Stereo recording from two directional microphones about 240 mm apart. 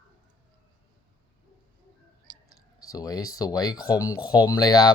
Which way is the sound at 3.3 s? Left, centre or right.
Centre.